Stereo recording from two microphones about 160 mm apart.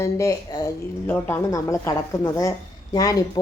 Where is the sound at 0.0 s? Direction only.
20° left (ahead or behind).